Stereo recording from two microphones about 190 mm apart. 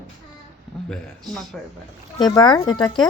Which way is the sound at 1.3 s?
Centre (ahead or behind).